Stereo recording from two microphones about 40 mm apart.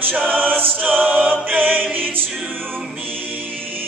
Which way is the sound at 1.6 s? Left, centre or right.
Right.